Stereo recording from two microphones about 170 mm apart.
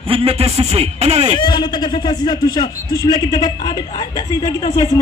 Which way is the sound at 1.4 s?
25° left (ahead or behind).